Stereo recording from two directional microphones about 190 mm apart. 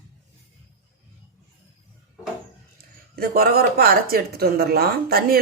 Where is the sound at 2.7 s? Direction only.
50° right (ahead or behind).